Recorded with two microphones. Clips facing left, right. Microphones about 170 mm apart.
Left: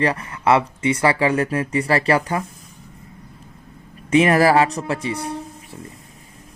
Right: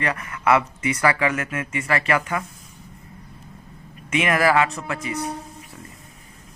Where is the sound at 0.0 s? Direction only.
30° left (ahead or behind).